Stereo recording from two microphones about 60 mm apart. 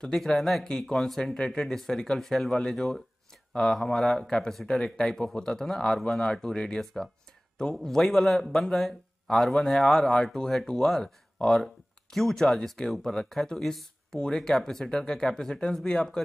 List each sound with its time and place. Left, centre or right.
0.0 s speech: centre